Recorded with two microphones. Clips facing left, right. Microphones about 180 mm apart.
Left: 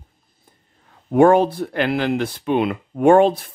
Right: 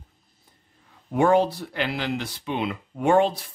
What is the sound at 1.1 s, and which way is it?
Speech, 55° left (ahead or behind).